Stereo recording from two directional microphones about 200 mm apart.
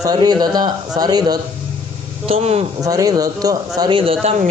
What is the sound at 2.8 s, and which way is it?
A man's voice, 15° right (ahead or behind).